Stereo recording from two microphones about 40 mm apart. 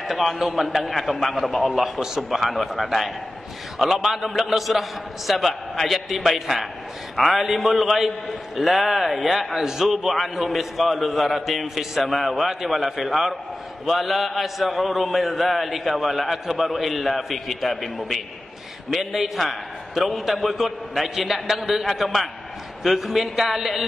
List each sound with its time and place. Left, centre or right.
0.1 s a man's voice: centre